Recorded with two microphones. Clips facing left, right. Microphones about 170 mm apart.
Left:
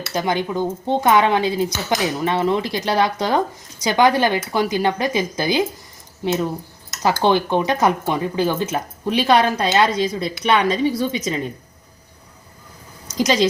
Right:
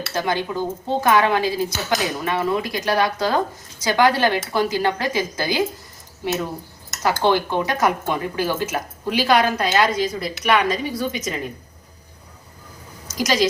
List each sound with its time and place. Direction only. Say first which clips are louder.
0.1 s speech: left 3 dB; 20° left (ahead or behind)
7.0 s speech: left 2 dB; 20° left (ahead or behind)
13.1 s speech: left 3 dB; 25° left (ahead or behind)